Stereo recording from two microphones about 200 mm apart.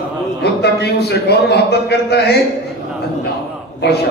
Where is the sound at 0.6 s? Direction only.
55° left (ahead or behind).